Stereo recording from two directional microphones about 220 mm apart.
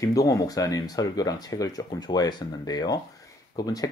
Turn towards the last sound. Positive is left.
turn(degrees=15)  # may be behind; listen again after turning